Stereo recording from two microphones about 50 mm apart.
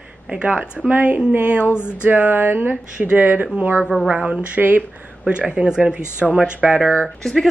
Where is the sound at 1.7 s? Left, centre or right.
Left.